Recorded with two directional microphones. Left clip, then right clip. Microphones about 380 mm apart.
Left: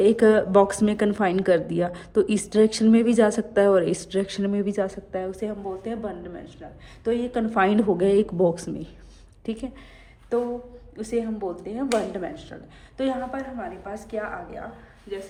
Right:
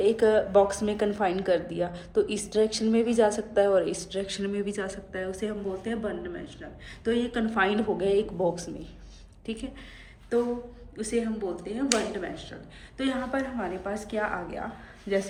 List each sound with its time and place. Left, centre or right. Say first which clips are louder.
0.0 s a woman's voice: left 4 dB; centre
10.9 s a woman's voice: left 2 dB; centre
13.0 s a woman's voice: left 2 dB; centre